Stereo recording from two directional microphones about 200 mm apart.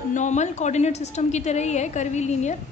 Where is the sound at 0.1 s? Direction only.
35° left (ahead or behind).